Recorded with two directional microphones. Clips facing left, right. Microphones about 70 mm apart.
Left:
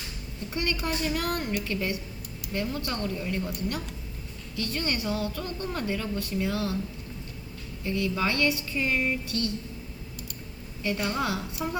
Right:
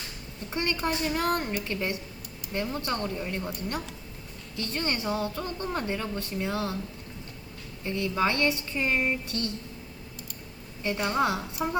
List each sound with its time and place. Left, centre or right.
0.5 s a woman's voice: right
7.9 s a woman's voice: right
10.8 s a woman's voice: right